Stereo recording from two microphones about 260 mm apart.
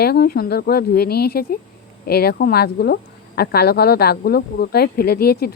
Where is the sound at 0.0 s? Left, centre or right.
Left.